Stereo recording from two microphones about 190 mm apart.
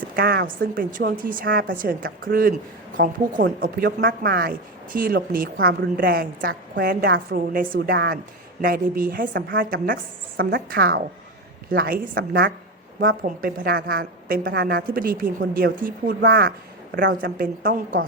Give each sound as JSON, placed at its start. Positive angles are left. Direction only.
{"t": 0.2, "sound": "a woman's voice", "side_deg": -55}
{"t": 3.6, "sound": "a woman's voice", "side_deg": -50}